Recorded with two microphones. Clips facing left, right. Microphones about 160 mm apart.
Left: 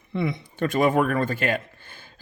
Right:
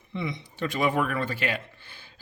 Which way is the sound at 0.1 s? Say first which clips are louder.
Left 6 dB; 55° left (ahead or behind).